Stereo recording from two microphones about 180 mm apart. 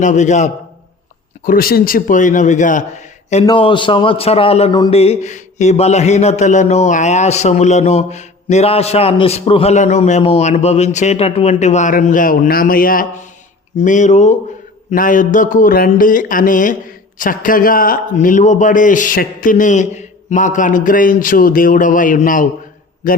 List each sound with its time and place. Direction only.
0.0 s speech: 40° left (ahead or behind)
1.5 s a man's voice: 55° left (ahead or behind)
3.4 s a man's voice: 25° left (ahead or behind); by 23.2 s 55° left (ahead or behind)